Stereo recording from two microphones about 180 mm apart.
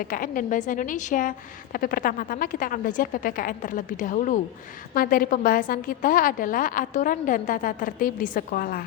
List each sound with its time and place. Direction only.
0.1 s a woman's voice: 50° left (ahead or behind)